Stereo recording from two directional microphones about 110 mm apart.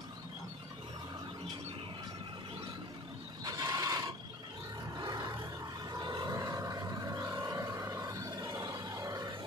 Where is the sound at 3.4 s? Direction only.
30° right (ahead or behind).